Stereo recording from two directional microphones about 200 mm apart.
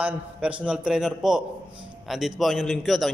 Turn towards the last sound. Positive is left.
turn(degrees=0)  # may be behind; listen again after turning